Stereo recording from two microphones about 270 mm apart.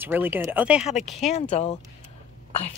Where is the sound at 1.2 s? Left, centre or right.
Left.